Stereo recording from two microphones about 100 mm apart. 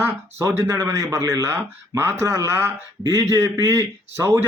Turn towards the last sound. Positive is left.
turn(degrees=-25)  # may be behind; listen again after turning